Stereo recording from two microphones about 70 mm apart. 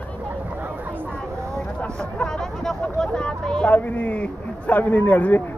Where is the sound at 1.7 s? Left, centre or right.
Centre.